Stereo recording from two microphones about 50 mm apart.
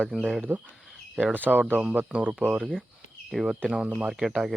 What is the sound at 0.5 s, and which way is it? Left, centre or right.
Speech, right.